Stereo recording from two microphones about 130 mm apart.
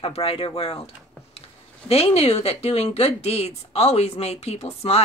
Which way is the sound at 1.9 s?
50° left (ahead or behind).